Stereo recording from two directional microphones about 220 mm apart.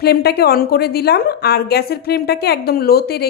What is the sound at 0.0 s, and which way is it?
A woman's voice, 45° left (ahead or behind).